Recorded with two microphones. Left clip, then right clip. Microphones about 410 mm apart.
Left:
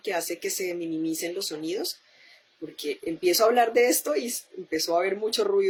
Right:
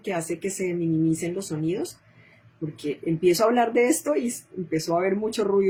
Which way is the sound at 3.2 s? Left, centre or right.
Centre.